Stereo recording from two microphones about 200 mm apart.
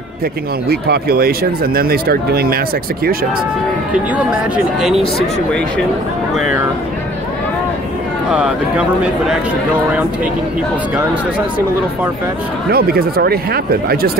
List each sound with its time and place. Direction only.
0.7 s speech: 50° right (ahead or behind)
8.3 s speech: 5° right (ahead or behind)
12.7 s speech: 50° right (ahead or behind)